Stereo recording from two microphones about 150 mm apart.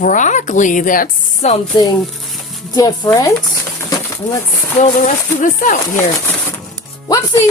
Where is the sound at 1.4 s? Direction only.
50° left (ahead or behind).